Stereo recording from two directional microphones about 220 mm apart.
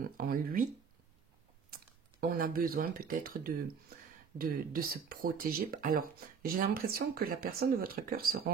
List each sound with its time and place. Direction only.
0.2 s speech: 40° right (ahead or behind)
1.7 s speech: 40° right (ahead or behind)